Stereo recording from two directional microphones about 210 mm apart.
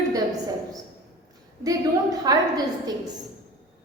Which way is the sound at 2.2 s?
20° right (ahead or behind).